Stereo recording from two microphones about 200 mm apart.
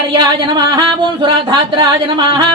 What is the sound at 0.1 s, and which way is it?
Speech, 20° right (ahead or behind).